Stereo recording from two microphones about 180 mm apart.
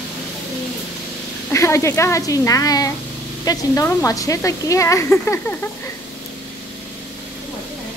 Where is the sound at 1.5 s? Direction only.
15° left (ahead or behind).